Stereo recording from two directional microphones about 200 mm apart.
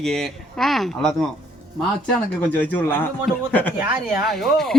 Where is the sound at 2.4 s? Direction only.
10° left (ahead or behind).